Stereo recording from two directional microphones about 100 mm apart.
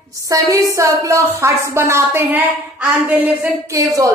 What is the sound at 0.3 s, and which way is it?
A woman's voice, 35° right (ahead or behind).